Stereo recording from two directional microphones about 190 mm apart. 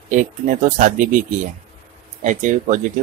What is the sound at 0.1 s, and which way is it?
Speech, 40° right (ahead or behind).